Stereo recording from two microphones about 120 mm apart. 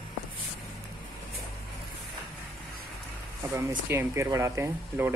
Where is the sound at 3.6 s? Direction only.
20° right (ahead or behind).